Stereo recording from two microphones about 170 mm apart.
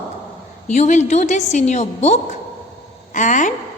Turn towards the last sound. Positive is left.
turn(degrees=50)  # may be behind; listen again after turning